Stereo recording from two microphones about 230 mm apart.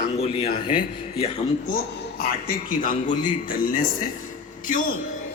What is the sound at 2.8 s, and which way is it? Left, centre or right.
A man's voice, left.